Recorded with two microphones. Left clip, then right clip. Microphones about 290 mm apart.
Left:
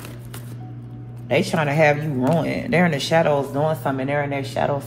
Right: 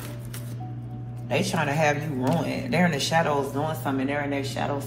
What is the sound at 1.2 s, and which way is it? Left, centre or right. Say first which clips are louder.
A man's voice: left 5 dB; left.